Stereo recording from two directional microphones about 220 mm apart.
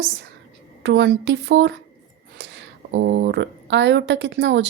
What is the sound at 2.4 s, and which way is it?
Speech, 50° right (ahead or behind).